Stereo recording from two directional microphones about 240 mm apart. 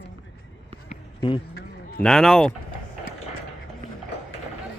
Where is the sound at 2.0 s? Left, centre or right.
Centre.